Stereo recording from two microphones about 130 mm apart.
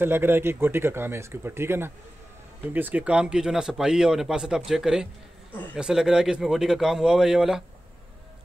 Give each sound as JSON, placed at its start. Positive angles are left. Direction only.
{"t": 0.0, "sound": "speech", "side_deg": -15}